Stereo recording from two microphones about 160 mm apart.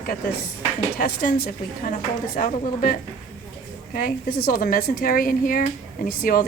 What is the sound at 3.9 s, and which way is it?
Speech, 65° left (ahead or behind).